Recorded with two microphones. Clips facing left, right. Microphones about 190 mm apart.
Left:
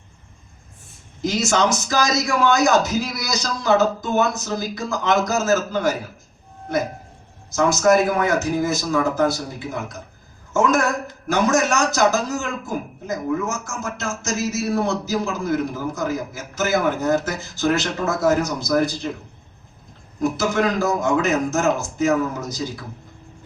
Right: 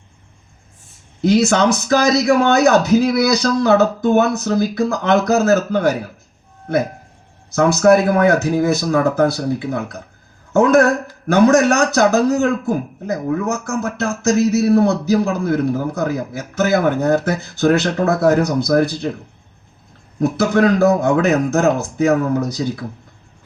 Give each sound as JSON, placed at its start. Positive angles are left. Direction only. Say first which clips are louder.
{"t": 1.2, "sound": "speech", "louder": "right 6 dB", "side_deg": -60}
{"t": 7.5, "sound": "speech", "louder": "right 4 dB", "side_deg": -60}
{"t": 20.1, "sound": "speech", "louder": "right 5 dB", "side_deg": -60}